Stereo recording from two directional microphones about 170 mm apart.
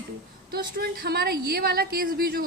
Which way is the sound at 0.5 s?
70° right (ahead or behind).